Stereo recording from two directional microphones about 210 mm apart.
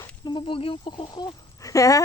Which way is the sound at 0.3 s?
25° left (ahead or behind).